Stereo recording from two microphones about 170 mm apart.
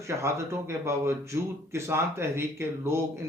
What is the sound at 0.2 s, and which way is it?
Speech, 15° right (ahead or behind).